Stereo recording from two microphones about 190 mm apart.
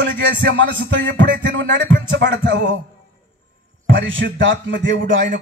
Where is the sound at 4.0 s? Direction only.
75° right (ahead or behind).